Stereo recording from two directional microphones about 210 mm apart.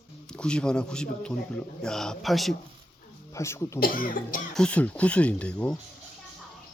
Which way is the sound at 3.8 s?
40° left (ahead or behind).